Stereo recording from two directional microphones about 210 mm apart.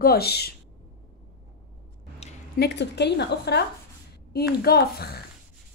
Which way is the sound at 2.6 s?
55° left (ahead or behind).